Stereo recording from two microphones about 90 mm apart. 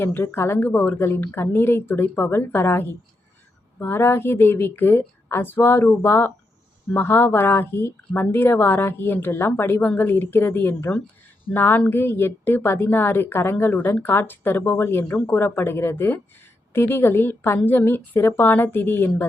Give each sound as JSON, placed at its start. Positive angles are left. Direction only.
{"t": 0.0, "sound": "a woman's voice", "side_deg": 25}